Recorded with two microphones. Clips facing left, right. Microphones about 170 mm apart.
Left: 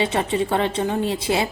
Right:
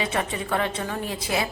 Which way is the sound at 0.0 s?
25° left (ahead or behind).